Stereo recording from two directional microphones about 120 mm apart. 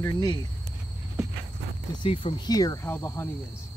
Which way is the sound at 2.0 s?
50° left (ahead or behind).